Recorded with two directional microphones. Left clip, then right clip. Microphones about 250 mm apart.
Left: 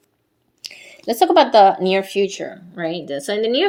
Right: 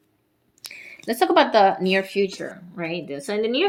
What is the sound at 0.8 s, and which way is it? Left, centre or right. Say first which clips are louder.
A woman's voice: left 5 dB; centre.